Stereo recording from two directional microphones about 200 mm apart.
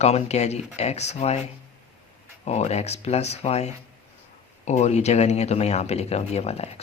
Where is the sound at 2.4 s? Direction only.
35° left (ahead or behind).